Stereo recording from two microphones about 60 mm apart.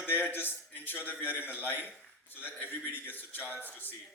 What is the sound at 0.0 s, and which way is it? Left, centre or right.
A man's voice, left.